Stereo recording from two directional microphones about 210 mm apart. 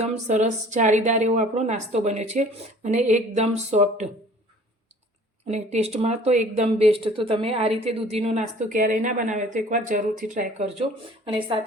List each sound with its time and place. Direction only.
0.0 s speech: 35° right (ahead or behind)
5.5 s speech: 30° right (ahead or behind)
11.3 s speech: 25° right (ahead or behind)